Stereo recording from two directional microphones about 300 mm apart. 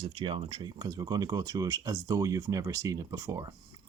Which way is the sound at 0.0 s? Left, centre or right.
Centre.